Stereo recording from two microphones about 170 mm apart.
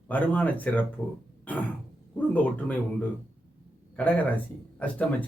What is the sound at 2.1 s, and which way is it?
Speech, 10° left (ahead or behind).